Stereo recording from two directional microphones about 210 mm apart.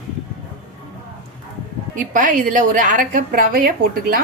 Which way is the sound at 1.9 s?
40° right (ahead or behind).